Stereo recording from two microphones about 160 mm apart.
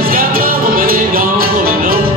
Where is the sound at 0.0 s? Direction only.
65° right (ahead or behind).